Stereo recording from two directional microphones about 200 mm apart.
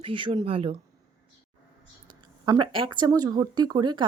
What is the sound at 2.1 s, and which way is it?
Speech, 20° right (ahead or behind).